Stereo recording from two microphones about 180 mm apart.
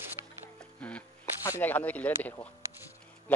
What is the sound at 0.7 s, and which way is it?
Music, 5° left (ahead or behind).